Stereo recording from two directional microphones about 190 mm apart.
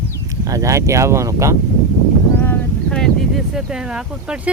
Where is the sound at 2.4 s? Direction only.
5° left (ahead or behind).